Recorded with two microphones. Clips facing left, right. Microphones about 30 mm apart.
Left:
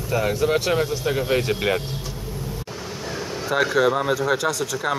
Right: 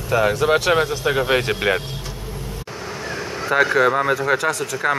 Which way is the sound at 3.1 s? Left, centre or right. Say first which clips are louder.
Right 3 dB; centre.